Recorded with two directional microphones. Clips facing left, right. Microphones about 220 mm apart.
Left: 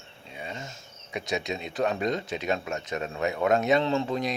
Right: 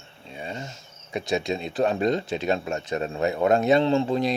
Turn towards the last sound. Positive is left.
turn(degrees=-30)  # may be behind; listen again after turning